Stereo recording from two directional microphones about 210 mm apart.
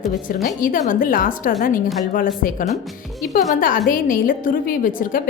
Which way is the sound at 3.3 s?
40° left (ahead or behind).